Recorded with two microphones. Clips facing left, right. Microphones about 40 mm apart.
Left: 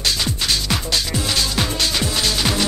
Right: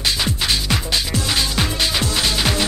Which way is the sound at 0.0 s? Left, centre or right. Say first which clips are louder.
Right 1 dB; centre.